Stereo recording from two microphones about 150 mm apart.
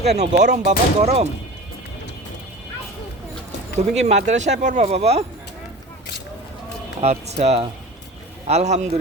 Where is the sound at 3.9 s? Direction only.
45° right (ahead or behind).